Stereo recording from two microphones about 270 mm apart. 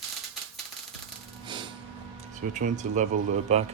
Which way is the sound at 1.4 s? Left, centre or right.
Centre.